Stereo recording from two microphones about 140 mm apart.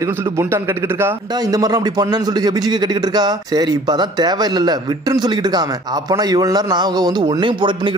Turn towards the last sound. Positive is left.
turn(degrees=-35)  # may be behind; listen again after turning